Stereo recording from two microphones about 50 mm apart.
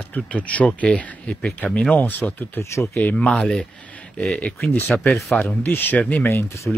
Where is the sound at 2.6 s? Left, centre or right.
Left.